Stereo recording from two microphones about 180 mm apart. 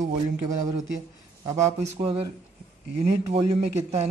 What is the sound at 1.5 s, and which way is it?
A man's voice, 40° right (ahead or behind).